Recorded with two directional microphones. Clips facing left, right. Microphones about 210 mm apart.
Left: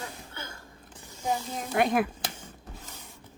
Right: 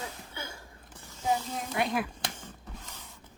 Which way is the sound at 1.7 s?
50° left (ahead or behind).